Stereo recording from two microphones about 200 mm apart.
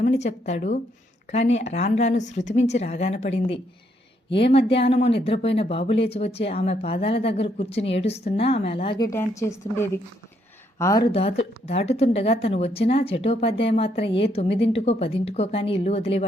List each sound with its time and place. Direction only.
0.0 s speech: 35° left (ahead or behind)
4.3 s speech: 60° left (ahead or behind)
4.8 s speech: 30° left (ahead or behind)
10.8 s speech: 15° left (ahead or behind)